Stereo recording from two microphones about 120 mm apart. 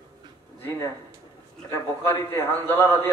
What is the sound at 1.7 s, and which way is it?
A man's voice, 15° left (ahead or behind).